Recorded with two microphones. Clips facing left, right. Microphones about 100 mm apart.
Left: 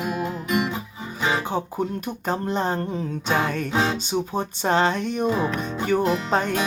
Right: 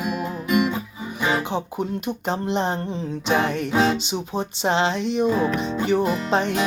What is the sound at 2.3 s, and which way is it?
Speech, 45° left (ahead or behind).